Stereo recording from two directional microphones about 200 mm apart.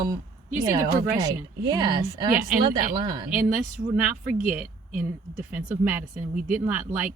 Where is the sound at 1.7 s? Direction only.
20° right (ahead or behind).